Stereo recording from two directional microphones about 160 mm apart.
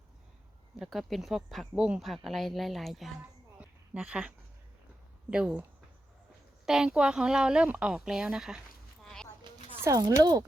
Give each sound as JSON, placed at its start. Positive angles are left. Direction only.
{"t": 0.8, "sound": "speech", "side_deg": 0}
{"t": 3.6, "sound": "a sound", "side_deg": -5}
{"t": 5.3, "sound": "speech", "side_deg": -5}
{"t": 6.7, "sound": "speech", "side_deg": -5}
{"t": 9.8, "sound": "speech", "side_deg": -20}